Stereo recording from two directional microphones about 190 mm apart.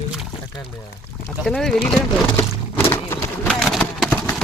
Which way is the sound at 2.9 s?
15° left (ahead or behind).